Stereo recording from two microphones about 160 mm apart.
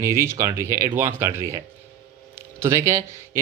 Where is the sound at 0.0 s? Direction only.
15° right (ahead or behind).